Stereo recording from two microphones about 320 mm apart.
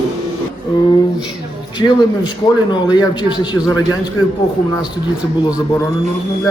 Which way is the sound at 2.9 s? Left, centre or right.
Centre.